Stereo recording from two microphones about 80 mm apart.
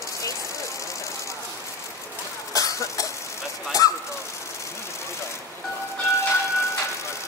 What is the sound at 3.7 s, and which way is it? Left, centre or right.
Bird, left.